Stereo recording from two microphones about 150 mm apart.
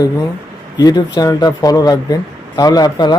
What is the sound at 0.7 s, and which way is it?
Speech, 25° left (ahead or behind).